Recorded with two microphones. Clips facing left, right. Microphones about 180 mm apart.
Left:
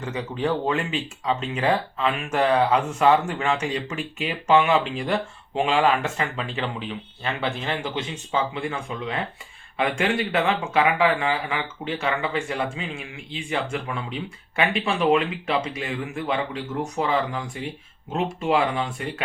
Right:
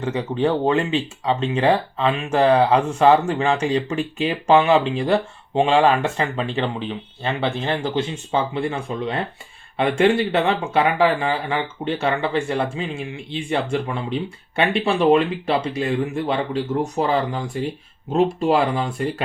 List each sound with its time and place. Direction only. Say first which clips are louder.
0.0 s speech: right 6 dB; 30° right (ahead or behind)